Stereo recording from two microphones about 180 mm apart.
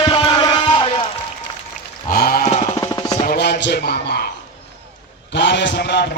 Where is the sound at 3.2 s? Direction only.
65° left (ahead or behind).